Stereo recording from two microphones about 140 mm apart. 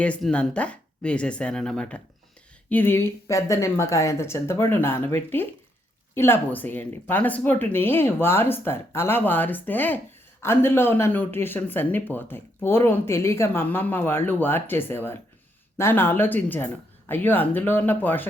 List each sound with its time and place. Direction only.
0.0 s speech: 5° left (ahead or behind)